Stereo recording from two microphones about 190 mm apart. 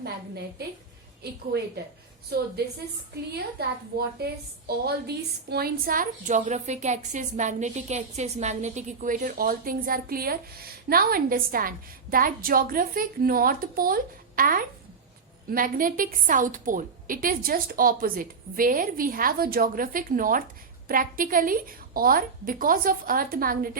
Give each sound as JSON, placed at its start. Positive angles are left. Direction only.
{"t": 1.2, "sound": "a woman's voice", "side_deg": -55}
{"t": 3.6, "sound": "a woman's voice", "side_deg": -55}